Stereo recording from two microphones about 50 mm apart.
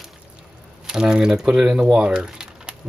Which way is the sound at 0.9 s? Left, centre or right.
Centre.